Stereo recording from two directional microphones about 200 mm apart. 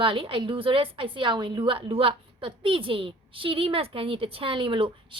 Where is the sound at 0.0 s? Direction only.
25° right (ahead or behind).